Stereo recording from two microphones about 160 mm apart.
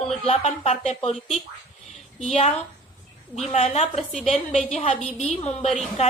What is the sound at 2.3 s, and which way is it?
Speech, 40° left (ahead or behind).